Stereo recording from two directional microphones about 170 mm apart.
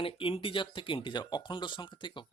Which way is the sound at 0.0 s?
30° left (ahead or behind).